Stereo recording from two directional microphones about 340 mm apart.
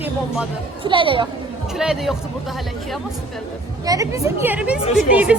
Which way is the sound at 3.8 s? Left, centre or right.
Centre.